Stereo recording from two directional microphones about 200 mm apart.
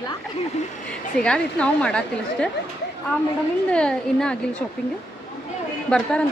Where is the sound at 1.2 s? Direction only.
5° left (ahead or behind).